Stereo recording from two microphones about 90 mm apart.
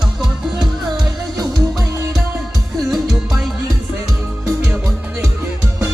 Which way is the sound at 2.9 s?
Centre (ahead or behind).